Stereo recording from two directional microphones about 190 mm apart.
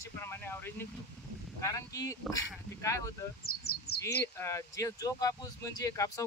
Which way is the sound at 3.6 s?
55° left (ahead or behind).